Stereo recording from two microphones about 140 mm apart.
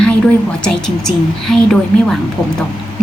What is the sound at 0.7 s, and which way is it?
A woman's voice, 5° left (ahead or behind).